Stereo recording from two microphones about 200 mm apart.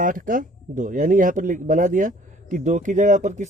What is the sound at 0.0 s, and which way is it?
Speech, 40° right (ahead or behind).